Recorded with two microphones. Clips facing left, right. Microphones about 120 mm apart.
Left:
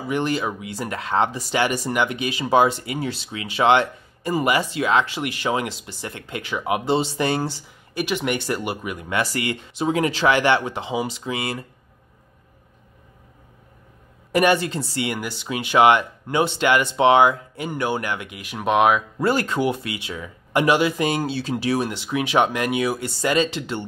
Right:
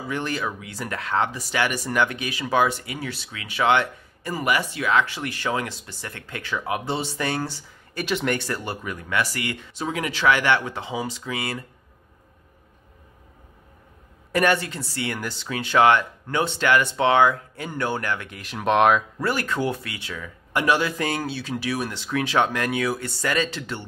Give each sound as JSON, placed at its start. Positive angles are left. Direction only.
{"t": 0.1, "sound": "speech", "side_deg": 20}
{"t": 8.0, "sound": "speech", "side_deg": 5}
{"t": 8.4, "sound": "speech", "side_deg": 15}
{"t": 9.2, "sound": "speech", "side_deg": 25}
{"t": 14.3, "sound": "speech", "side_deg": 20}
{"t": 19.2, "sound": "speech", "side_deg": 25}
{"t": 21.3, "sound": "speech", "side_deg": 30}
{"t": 21.9, "sound": "speech", "side_deg": 15}